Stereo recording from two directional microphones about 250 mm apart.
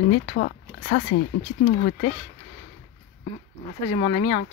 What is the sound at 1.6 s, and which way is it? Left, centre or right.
Speech, left.